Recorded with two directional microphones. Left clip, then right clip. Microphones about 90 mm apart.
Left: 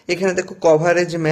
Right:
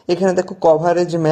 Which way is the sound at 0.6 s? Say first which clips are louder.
Even; 40° right (ahead or behind).